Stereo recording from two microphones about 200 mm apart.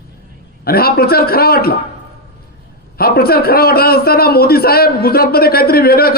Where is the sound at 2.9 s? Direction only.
50° left (ahead or behind).